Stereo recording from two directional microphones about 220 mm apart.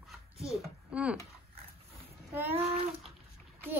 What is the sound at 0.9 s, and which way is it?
Speech, 5° right (ahead or behind).